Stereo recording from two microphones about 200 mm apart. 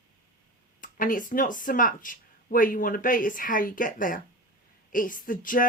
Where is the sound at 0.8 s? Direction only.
45° left (ahead or behind).